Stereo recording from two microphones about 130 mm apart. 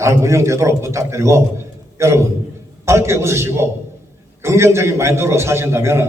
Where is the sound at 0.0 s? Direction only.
20° right (ahead or behind).